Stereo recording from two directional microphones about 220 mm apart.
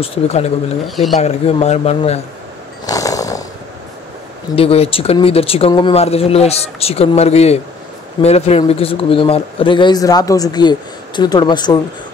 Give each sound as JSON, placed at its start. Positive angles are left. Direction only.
{"t": 0.0, "sound": "a man's voice", "side_deg": 25}
{"t": 0.8, "sound": "speech", "side_deg": 0}
{"t": 1.2, "sound": "a man's voice", "side_deg": 30}
{"t": 2.9, "sound": "snoring", "side_deg": 15}
{"t": 4.6, "sound": "a man's voice", "side_deg": 25}